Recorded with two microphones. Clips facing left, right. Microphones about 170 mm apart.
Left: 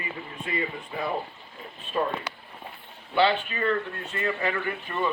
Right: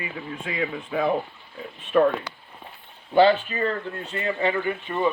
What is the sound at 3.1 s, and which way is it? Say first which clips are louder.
Speech: right 6 dB; 45° right (ahead or behind).